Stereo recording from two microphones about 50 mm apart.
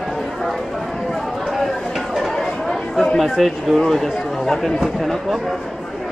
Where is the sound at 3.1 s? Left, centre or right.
Centre.